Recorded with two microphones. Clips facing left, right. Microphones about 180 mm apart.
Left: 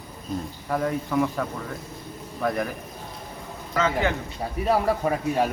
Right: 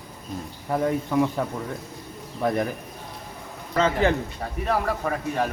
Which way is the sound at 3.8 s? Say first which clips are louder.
Right 2 dB; 30° right (ahead or behind).